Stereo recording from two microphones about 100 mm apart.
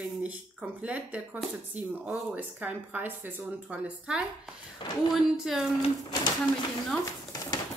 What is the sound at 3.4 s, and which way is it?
Speech, 10° right (ahead or behind).